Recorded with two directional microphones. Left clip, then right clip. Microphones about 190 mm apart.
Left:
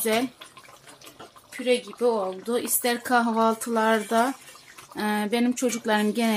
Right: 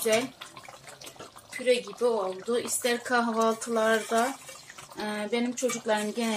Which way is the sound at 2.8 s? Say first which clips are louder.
Left 5 dB; 60° left (ahead or behind).